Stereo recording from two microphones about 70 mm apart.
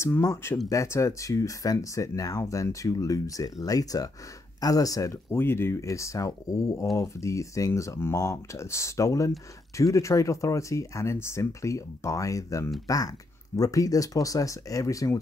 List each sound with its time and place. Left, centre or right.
0.0 s speech: left
5.3 s speech: left